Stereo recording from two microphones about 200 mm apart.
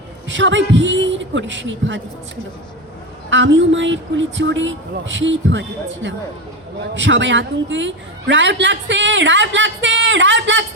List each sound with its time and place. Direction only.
0.3 s a woman's voice: 65° right (ahead or behind)